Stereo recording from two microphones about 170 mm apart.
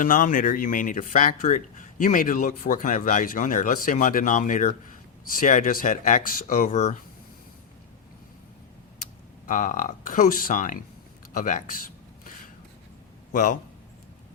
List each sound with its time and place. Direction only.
0.0 s speech: 50° left (ahead or behind)
9.5 s speech: 50° left (ahead or behind)
13.3 s speech: 50° left (ahead or behind)